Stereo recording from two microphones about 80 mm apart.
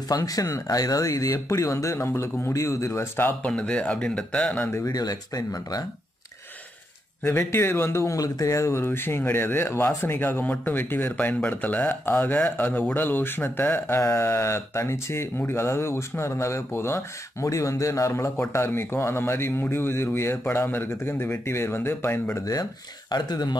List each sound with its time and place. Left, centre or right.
0.1 s speech: left
3.4 s speech: centre
4.6 s speech: left
4.8 s speech: left
7.2 s speech: left
22.4 s speech: left